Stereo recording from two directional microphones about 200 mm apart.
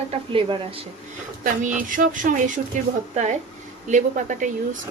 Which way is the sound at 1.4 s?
45° right (ahead or behind).